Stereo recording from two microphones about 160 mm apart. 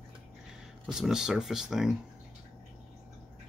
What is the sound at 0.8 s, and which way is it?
Speech, 5° right (ahead or behind).